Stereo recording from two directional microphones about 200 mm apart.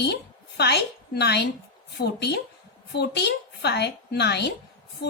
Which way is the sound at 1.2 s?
55° left (ahead or behind).